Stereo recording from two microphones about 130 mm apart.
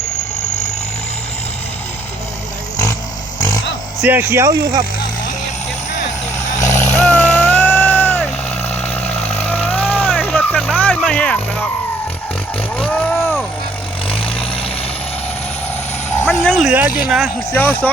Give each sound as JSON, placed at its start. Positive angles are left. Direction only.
{"t": 4.0, "sound": "speech", "side_deg": -15}
{"t": 6.7, "sound": "vehicle", "side_deg": 20}
{"t": 7.0, "sound": "music", "side_deg": 15}
{"t": 8.7, "sound": "vehicle", "side_deg": 15}
{"t": 12.7, "sound": "vehicle", "side_deg": 10}
{"t": 14.1, "sound": "vehicle", "side_deg": 45}
{"t": 16.0, "sound": "a sound", "side_deg": 15}
{"t": 16.6, "sound": "speech", "side_deg": -10}
{"t": 17.5, "sound": "speech", "side_deg": 15}